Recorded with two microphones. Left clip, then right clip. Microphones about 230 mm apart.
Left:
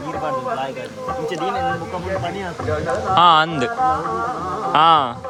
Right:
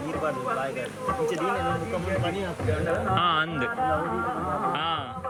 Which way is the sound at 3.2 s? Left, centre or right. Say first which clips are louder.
Left 15 dB; centre.